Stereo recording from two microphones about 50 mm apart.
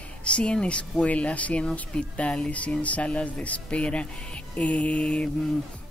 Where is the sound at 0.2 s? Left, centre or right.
Left.